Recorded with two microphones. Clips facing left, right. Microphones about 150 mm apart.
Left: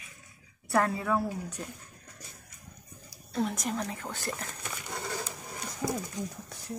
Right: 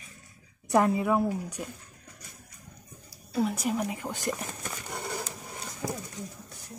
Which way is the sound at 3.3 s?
5° right (ahead or behind).